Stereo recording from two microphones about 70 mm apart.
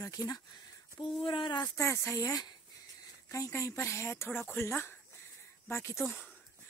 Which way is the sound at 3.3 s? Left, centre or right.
Left.